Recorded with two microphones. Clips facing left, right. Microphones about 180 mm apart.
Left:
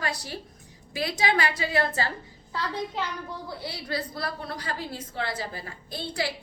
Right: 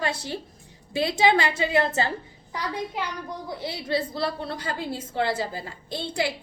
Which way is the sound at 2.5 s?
15° right (ahead or behind).